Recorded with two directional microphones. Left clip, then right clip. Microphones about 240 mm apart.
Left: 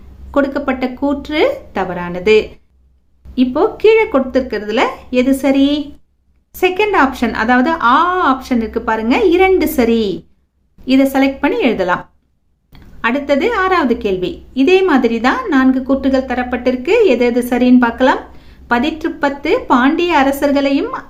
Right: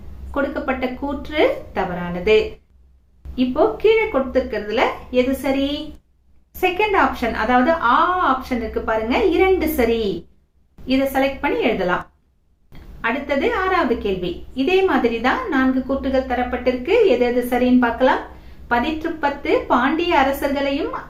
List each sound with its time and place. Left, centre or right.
0.3 s a woman's voice: left
13.0 s a woman's voice: left